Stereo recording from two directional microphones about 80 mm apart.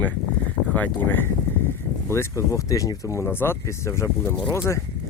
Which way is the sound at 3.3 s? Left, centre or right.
Left.